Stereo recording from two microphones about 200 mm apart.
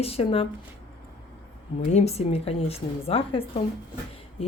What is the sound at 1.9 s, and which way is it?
A woman's voice, 35° left (ahead or behind).